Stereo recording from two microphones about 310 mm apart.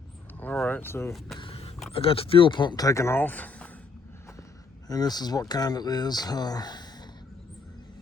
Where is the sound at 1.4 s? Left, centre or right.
Centre.